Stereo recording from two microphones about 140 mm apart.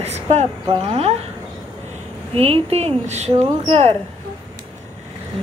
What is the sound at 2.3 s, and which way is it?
Speech, 45° right (ahead or behind).